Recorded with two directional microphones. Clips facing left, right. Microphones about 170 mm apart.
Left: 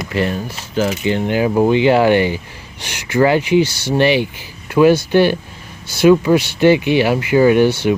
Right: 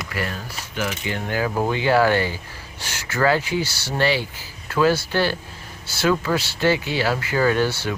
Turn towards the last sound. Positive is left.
turn(degrees=20)  # may be behind; listen again after turning